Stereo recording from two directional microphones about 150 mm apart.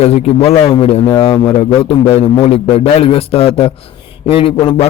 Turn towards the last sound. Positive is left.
turn(degrees=40)  # may be behind; listen again after turning